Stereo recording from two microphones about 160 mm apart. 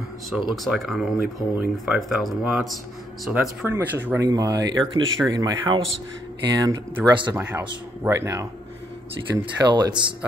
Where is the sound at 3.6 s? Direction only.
15° right (ahead or behind).